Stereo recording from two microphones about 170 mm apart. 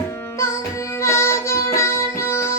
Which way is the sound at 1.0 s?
15° left (ahead or behind).